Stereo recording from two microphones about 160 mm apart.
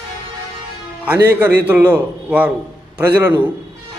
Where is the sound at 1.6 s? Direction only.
10° right (ahead or behind).